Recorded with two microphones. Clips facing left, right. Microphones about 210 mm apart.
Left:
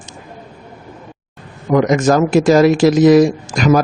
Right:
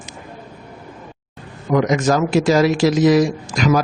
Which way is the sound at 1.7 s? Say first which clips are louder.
Left 4 dB; 50° left (ahead or behind).